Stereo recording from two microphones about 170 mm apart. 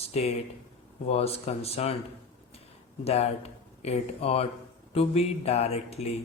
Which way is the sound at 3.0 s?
40° left (ahead or behind).